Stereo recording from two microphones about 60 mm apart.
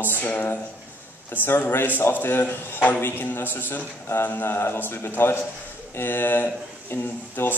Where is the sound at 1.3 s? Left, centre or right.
Left.